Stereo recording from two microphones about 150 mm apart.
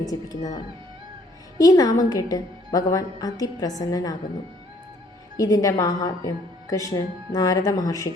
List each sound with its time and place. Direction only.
0.0 s a woman's voice: 25° left (ahead or behind)
5.4 s a woman's voice: 25° left (ahead or behind)